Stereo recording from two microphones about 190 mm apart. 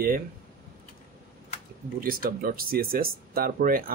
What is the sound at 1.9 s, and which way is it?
Speech, 50° right (ahead or behind).